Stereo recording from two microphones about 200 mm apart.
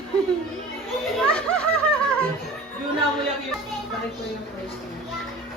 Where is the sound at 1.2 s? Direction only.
5° left (ahead or behind).